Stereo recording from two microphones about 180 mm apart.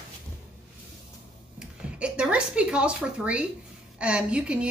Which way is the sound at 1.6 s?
5° right (ahead or behind).